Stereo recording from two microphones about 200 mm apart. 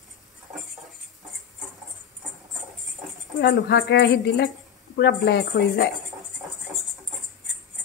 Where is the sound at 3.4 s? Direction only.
60° left (ahead or behind).